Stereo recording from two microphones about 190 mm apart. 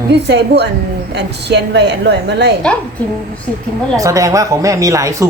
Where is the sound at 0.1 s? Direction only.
65° right (ahead or behind).